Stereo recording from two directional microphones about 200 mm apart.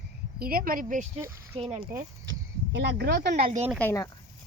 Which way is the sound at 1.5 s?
25° right (ahead or behind).